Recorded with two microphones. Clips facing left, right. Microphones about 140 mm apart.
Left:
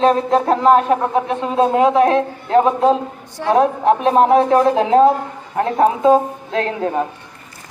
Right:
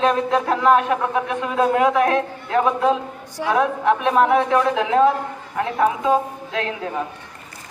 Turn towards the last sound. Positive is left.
turn(degrees=40)  # may be behind; listen again after turning